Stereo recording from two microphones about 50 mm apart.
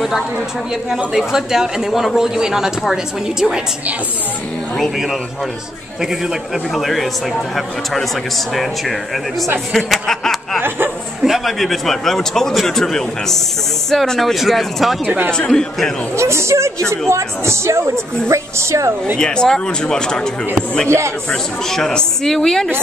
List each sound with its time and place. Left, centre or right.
0.8 s speech: centre
5.9 s a man's voice: centre
10.0 s chuckle: centre
11.2 s a man's voice: centre
15.0 s a man's voice: right
15.3 s a woman's voice: centre
16.2 s a man's voice: right
18.3 s a man's voice: right
19.1 s a woman's voice: centre
21.3 s a woman's voice: centre